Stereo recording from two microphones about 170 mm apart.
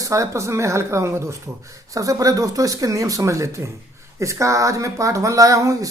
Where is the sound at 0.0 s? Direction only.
20° right (ahead or behind).